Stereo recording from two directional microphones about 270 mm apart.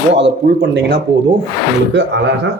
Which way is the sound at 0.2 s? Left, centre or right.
Right.